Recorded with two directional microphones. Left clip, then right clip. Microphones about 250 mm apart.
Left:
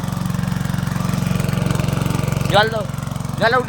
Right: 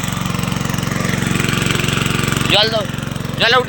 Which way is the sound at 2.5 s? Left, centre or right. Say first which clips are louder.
Right 1 dB; left.